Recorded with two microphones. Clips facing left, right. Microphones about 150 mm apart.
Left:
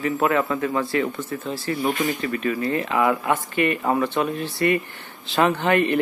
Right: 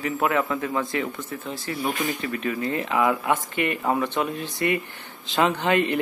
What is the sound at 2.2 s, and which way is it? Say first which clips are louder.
Speech: left 3 dB; 20° right (ahead or behind).